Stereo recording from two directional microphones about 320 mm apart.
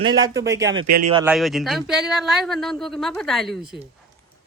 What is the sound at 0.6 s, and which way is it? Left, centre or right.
Speech, right.